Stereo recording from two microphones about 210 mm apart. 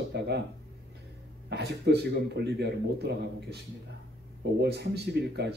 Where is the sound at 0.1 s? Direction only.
55° right (ahead or behind).